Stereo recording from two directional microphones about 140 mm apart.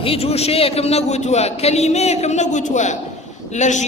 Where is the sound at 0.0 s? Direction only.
45° left (ahead or behind).